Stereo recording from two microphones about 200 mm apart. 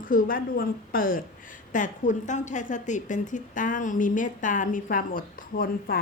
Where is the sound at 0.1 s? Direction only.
45° left (ahead or behind).